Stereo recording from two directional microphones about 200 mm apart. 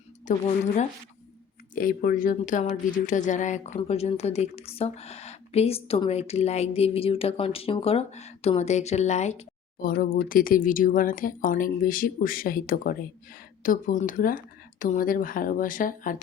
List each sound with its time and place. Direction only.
0.3 s speech: 35° left (ahead or behind)
9.8 s speech: 45° left (ahead or behind)